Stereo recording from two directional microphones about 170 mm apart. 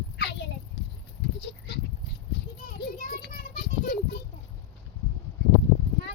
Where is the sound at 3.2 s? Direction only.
70° left (ahead or behind).